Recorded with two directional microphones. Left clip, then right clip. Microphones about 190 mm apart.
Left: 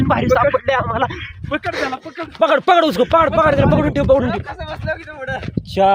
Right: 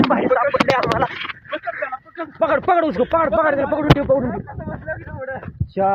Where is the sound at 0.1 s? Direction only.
20° left (ahead or behind).